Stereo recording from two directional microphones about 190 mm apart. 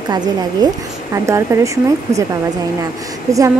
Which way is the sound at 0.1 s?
20° right (ahead or behind).